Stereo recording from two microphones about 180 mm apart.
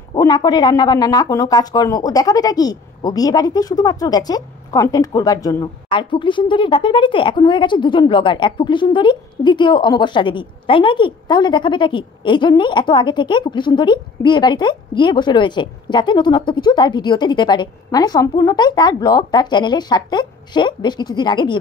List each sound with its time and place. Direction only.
0.1 s speech: 25° left (ahead or behind)